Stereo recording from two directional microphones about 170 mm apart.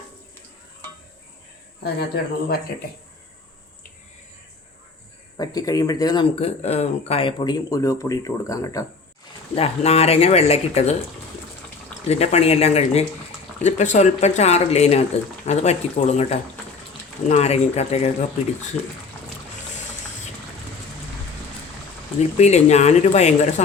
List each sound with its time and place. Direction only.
5.4 s speech: 20° left (ahead or behind)
6.4 s speech: 40° left (ahead or behind); by 8.9 s 20° left (ahead or behind)
9.6 s speech: 35° left (ahead or behind)
12.0 s speech: 40° left (ahead or behind)
22.4 s speech: 40° left (ahead or behind)